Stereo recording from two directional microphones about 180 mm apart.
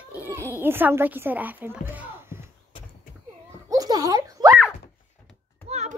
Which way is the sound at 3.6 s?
20° right (ahead or behind).